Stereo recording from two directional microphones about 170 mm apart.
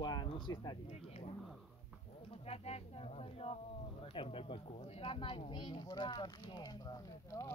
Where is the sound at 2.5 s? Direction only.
40° left (ahead or behind).